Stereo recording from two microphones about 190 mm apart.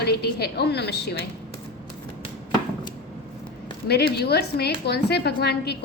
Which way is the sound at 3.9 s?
60° left (ahead or behind).